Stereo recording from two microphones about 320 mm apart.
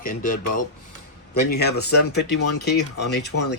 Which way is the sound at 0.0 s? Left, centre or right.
Left.